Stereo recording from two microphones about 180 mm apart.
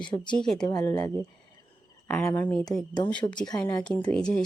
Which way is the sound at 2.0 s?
5° left (ahead or behind).